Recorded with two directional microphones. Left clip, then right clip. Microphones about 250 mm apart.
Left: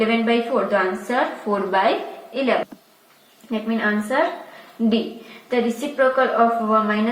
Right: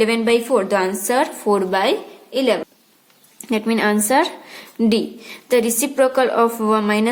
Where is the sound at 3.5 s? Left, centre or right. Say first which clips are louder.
Right 5 dB; right.